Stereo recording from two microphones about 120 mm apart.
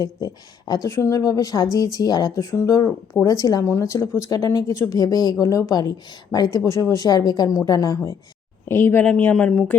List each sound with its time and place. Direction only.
0.7 s a woman's voice: 30° left (ahead or behind)
8.6 s speech: 20° left (ahead or behind)